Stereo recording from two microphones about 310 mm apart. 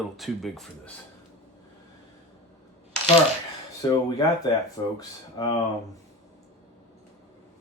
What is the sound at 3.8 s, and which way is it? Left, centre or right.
Speech, centre.